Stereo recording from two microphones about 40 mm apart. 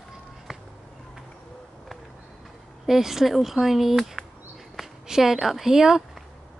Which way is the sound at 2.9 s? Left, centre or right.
Centre.